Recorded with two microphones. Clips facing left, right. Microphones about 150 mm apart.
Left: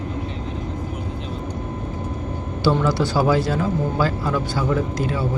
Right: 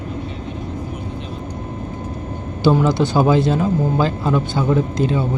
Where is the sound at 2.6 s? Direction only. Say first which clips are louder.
Right 4 dB; 20° right (ahead or behind).